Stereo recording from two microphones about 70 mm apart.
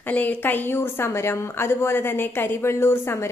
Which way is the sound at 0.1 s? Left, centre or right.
Left.